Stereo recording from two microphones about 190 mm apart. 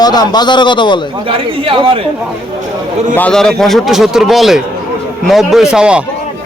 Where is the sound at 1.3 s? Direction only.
30° right (ahead or behind).